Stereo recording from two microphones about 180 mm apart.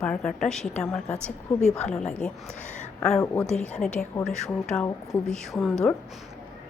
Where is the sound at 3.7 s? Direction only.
5° left (ahead or behind).